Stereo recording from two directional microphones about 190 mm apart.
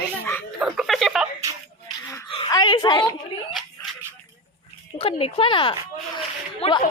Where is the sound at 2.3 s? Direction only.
25° left (ahead or behind).